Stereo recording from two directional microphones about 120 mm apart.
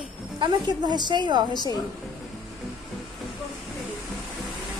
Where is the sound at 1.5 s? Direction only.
35° left (ahead or behind).